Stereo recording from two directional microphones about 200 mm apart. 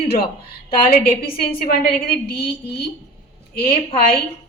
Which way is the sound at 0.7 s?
45° left (ahead or behind).